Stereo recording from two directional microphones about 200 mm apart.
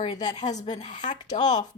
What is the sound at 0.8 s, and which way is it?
Speech, 40° left (ahead or behind).